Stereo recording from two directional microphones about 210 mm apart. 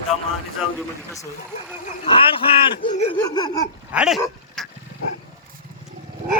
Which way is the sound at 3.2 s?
20° left (ahead or behind).